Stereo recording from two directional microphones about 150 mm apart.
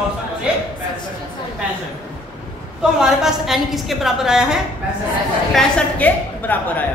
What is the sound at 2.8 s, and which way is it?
A woman's voice, 5° right (ahead or behind).